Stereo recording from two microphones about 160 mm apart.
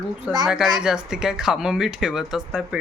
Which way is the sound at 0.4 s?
Centre (ahead or behind).